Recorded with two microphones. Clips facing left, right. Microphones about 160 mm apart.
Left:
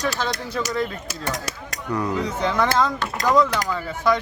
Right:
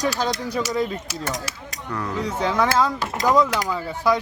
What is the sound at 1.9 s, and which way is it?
Speech, 15° left (ahead or behind).